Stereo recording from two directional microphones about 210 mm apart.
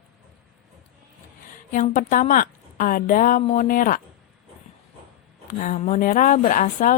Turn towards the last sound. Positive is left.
turn(degrees=40)  # may be behind; listen again after turning